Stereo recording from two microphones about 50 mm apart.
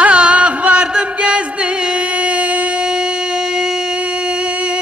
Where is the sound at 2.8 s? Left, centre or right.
Centre.